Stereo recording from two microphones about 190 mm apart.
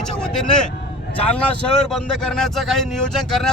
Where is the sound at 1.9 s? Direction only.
5° left (ahead or behind).